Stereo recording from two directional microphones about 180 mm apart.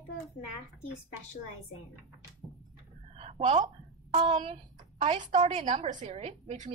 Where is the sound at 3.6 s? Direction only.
25° right (ahead or behind).